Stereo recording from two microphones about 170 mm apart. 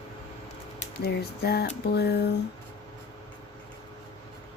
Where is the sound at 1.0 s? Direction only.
70° left (ahead or behind).